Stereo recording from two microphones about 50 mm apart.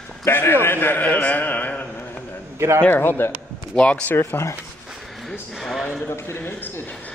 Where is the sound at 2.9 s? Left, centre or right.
Left.